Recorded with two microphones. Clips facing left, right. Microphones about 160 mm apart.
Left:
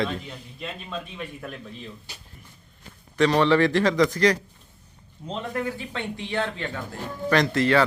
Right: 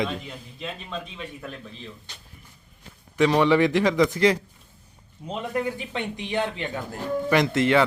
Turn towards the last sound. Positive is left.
turn(degrees=-20)  # may be behind; listen again after turning